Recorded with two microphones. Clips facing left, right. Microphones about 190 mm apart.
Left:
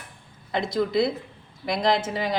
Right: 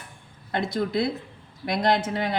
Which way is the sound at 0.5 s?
55° right (ahead or behind).